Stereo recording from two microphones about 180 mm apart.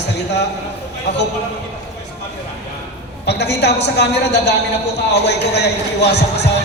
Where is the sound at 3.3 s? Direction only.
70° left (ahead or behind).